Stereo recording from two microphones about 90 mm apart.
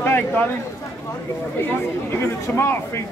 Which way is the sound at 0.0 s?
25° left (ahead or behind).